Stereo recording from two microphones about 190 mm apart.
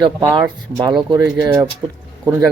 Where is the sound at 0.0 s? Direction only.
25° right (ahead or behind).